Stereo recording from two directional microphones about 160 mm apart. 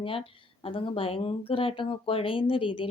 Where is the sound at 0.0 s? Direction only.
35° left (ahead or behind).